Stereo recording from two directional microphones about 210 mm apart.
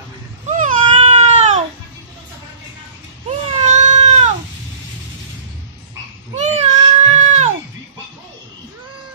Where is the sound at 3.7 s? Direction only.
30° right (ahead or behind).